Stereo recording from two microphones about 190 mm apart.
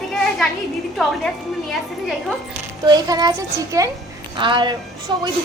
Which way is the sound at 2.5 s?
20° right (ahead or behind).